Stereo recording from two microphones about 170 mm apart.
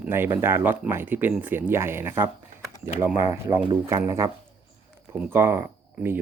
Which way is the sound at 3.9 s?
20° right (ahead or behind).